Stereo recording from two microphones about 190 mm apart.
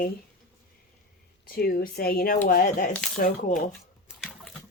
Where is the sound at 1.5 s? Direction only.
50° left (ahead or behind).